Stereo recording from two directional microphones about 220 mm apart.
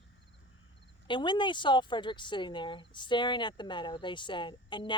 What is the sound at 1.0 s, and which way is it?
Speech, 20° left (ahead or behind).